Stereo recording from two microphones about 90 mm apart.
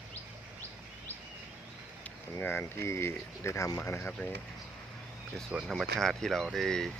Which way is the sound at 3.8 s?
25° left (ahead or behind).